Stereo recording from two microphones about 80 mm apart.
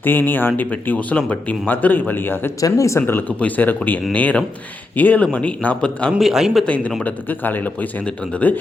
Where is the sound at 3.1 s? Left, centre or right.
Left.